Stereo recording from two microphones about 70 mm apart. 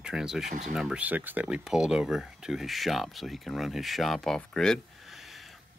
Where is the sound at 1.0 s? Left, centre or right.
Right.